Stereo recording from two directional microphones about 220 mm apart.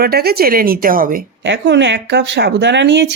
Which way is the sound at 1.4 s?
55° right (ahead or behind).